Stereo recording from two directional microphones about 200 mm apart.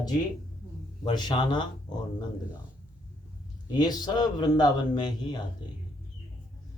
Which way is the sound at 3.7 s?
20° left (ahead or behind).